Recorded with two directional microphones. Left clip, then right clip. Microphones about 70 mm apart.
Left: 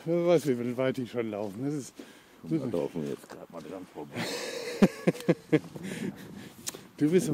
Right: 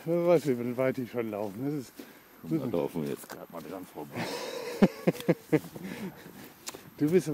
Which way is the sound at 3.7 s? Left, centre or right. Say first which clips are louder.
Left 1 dB; right.